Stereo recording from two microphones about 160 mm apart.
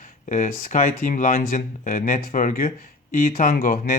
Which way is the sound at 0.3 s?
55° left (ahead or behind).